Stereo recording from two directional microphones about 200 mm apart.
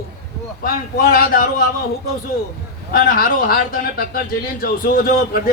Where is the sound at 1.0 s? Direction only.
45° left (ahead or behind).